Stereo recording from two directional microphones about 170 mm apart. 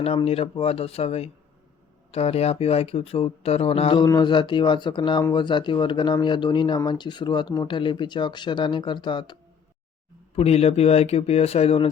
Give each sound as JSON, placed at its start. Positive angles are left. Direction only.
{"t": 0.0, "sound": "speech", "side_deg": 35}
{"t": 10.3, "sound": "speech", "side_deg": 35}